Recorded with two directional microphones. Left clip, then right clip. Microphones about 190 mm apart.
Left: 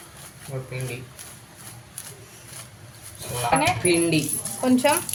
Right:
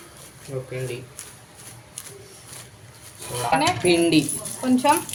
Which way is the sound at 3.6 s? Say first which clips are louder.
Right 4 dB; 20° right (ahead or behind).